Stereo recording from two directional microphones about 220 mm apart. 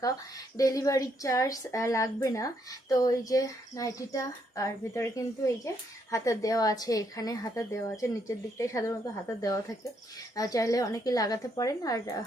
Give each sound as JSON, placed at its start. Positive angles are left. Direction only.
{"t": 0.0, "sound": "a woman's voice", "side_deg": 15}